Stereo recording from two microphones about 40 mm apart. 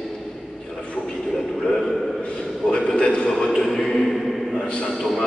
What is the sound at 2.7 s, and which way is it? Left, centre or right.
A man's voice, centre.